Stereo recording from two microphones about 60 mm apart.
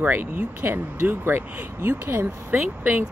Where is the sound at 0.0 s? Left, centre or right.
Right.